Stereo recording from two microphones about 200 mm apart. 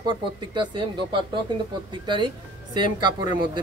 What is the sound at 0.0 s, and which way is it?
Speech, 25° right (ahead or behind).